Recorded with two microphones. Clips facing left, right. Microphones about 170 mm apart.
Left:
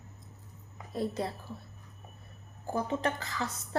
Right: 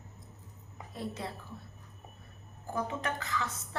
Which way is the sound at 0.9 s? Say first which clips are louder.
Left 6 dB; 35° left (ahead or behind).